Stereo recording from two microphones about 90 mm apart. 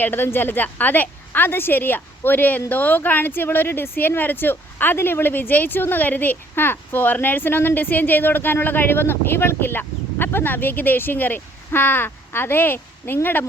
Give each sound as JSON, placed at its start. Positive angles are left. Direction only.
{"t": 0.0, "sound": "a woman's voice", "side_deg": 25}